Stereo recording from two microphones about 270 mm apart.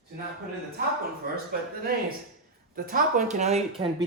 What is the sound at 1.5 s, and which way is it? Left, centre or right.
Speech, right.